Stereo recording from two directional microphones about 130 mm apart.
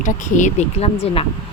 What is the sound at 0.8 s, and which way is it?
Speech, 50° left (ahead or behind).